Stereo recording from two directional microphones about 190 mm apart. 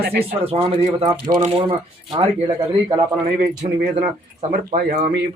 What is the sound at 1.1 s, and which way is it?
A man's voice, 20° right (ahead or behind).